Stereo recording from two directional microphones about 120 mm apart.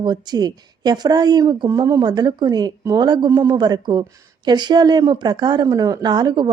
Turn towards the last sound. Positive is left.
turn(degrees=-40)  # may be behind; listen again after turning